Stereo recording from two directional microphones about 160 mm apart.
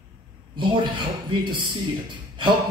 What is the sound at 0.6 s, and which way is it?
A man's voice, 30° right (ahead or behind).